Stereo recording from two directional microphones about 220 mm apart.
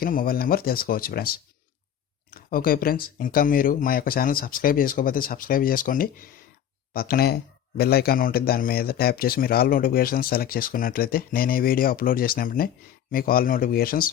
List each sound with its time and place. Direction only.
0.0 s speech: 40° left (ahead or behind)